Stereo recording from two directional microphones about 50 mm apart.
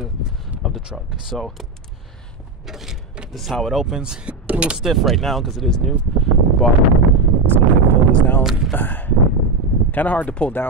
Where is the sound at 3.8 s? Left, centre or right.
Centre.